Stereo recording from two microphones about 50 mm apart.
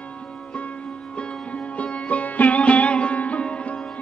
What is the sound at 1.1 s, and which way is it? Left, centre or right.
Sitar, left.